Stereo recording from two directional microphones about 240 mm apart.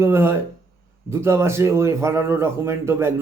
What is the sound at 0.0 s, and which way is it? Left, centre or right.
A man's voice, centre.